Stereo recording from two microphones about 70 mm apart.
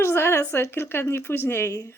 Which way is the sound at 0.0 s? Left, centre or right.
Left.